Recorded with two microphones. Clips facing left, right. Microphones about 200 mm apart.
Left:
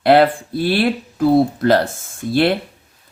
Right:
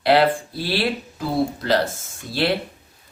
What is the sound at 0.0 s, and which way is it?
Speech, 50° left (ahead or behind).